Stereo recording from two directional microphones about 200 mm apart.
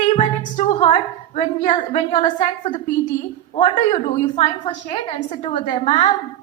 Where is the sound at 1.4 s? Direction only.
30° left (ahead or behind).